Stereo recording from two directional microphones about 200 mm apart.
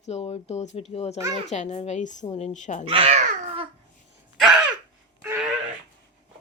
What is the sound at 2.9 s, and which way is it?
Babbling, 30° right (ahead or behind).